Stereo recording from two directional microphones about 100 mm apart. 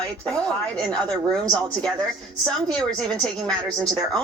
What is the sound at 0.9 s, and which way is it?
Speech, 40° right (ahead or behind).